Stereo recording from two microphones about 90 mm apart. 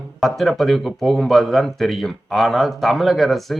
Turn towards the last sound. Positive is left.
turn(degrees=0)  # may be behind; listen again after turning